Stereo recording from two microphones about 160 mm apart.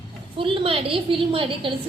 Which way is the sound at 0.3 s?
35° right (ahead or behind).